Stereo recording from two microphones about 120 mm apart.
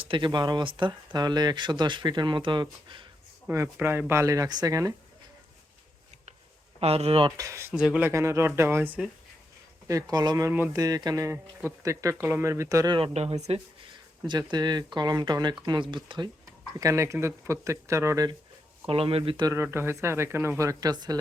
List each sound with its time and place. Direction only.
0.0 s speech: 45° right (ahead or behind)
3.5 s speech: 20° right (ahead or behind)
6.7 s speech: 55° right (ahead or behind)
7.3 s speech: 30° right (ahead or behind)
7.7 s speech: 10° right (ahead or behind)
8.1 s speech: 25° right (ahead or behind)
9.8 s speech: 30° right (ahead or behind)
10.5 s speech: 15° right (ahead or behind)
10.8 s speech: 30° right (ahead or behind)
13.0 s speech: 60° right (ahead or behind)
14.3 s speech: 35° right (ahead or behind)
16.8 s speech: 25° right (ahead or behind)
18.9 s speech: 50° right (ahead or behind)
19.6 s speech: 20° right (ahead or behind)